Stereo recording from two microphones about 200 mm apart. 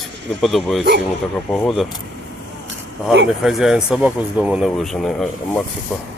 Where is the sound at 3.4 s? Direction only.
Centre (ahead or behind).